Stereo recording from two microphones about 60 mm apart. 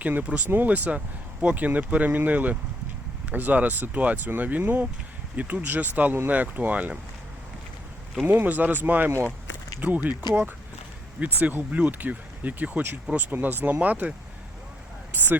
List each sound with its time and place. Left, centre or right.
0.0 s speech: right
8.3 s speech: right
15.1 s speech: right